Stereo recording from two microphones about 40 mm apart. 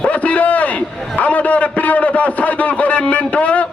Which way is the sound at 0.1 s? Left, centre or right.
Left.